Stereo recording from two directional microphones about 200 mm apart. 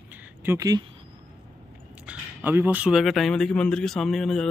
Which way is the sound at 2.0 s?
10° right (ahead or behind).